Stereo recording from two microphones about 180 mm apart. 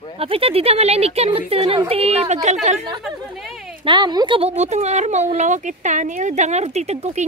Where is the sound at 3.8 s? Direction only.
25° right (ahead or behind).